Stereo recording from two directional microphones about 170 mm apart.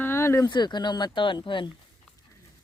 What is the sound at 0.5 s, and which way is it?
Speech, 25° left (ahead or behind).